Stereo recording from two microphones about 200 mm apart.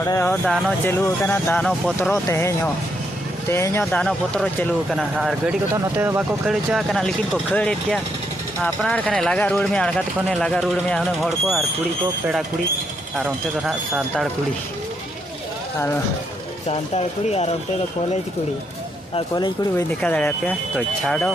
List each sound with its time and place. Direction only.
0.0 s speech: 15° left (ahead or behind)
2.2 s speech: 15° left (ahead or behind)
13.1 s speech: 5° right (ahead or behind)
16.6 s speech: 30° left (ahead or behind)
19.7 s speech: 5° left (ahead or behind)